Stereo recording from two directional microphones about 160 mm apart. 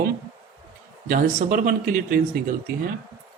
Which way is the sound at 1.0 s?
50° right (ahead or behind).